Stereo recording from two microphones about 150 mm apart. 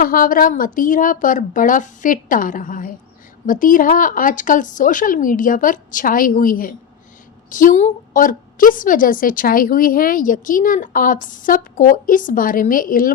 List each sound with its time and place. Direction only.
0.0 s a woman's voice: 70° left (ahead or behind)